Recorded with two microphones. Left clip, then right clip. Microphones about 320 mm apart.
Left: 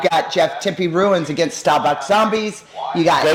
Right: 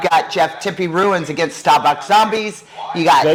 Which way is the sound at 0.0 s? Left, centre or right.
Right.